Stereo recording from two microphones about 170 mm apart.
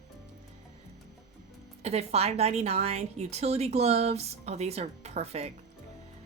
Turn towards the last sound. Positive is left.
turn(degrees=-40)  # may be behind; listen again after turning